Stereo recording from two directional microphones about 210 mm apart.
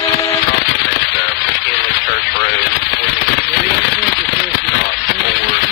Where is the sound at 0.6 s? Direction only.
55° left (ahead or behind).